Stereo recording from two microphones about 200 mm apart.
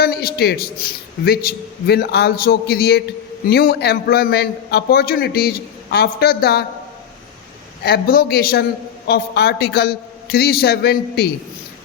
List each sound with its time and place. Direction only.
0.0 s a man's voice: 50° left (ahead or behind)
7.9 s a man's voice: 50° left (ahead or behind)